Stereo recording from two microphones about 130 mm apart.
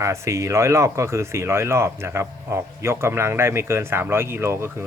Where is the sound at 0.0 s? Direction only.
20° right (ahead or behind).